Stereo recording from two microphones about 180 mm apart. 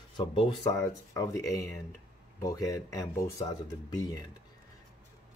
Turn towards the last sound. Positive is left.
turn(degrees=20)  # may be behind; listen again after turning